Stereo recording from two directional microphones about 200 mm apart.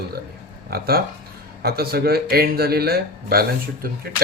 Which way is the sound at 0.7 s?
50° right (ahead or behind).